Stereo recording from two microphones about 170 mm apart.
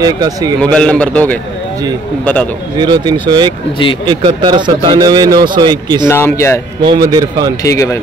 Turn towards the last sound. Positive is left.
turn(degrees=20)  # may be behind; listen again after turning